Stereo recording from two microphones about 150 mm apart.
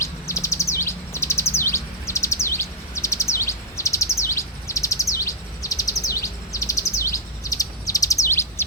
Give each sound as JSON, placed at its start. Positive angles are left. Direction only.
{"t": 0.0, "sound": "chirp", "side_deg": 20}